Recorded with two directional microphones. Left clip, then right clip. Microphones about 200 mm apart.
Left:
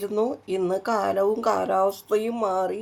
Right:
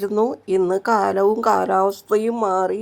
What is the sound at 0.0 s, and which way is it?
Speech, 25° right (ahead or behind).